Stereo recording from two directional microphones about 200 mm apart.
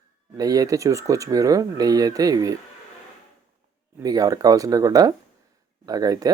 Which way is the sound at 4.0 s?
20° right (ahead or behind).